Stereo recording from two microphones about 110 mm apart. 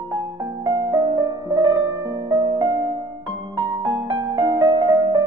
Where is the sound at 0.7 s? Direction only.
40° right (ahead or behind).